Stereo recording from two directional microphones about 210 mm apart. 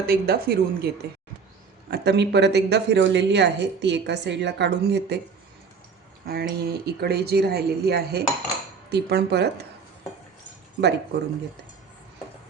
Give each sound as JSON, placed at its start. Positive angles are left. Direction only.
{"t": 0.1, "sound": "speech", "side_deg": -45}
{"t": 1.9, "sound": "speech", "side_deg": -55}
{"t": 6.2, "sound": "speech", "side_deg": -50}
{"t": 10.8, "sound": "speech", "side_deg": -55}